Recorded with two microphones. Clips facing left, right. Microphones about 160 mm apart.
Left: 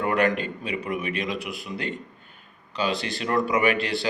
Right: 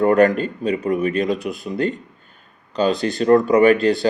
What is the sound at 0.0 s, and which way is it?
Speech, 40° right (ahead or behind).